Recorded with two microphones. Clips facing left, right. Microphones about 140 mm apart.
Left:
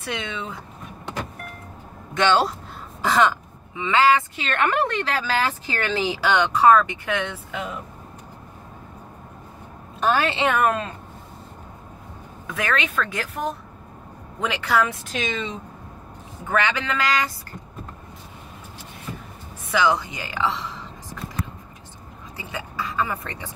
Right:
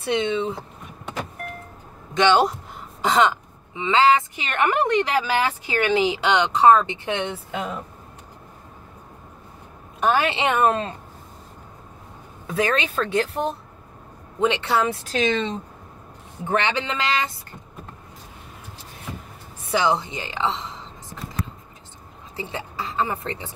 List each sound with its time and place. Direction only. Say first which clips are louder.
0.0 s speech: right 8 dB; 30° right (ahead or behind)
2.1 s speech: right 2 dB; 20° right (ahead or behind)
9.9 s speech: right 1 dB; 15° right (ahead or behind)
12.4 s speech: right 3 dB; 30° right (ahead or behind)
19.7 s speech: even; 30° right (ahead or behind)
22.4 s speech: right 1 dB; 25° right (ahead or behind)